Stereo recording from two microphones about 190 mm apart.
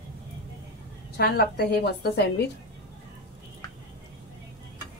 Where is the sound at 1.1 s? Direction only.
55° left (ahead or behind).